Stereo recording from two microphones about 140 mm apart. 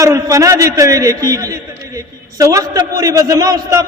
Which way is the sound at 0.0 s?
20° right (ahead or behind).